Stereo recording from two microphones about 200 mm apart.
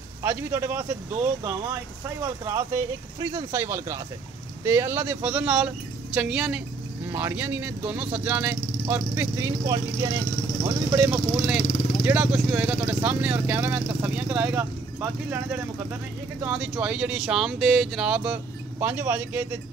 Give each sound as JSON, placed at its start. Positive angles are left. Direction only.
{"t": 0.2, "sound": "speech", "side_deg": -10}
{"t": 11.6, "sound": "vehicle", "side_deg": 40}
{"t": 12.0, "sound": "speech", "side_deg": -10}